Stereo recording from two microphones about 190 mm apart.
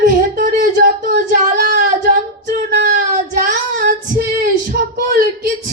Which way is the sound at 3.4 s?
50° right (ahead or behind).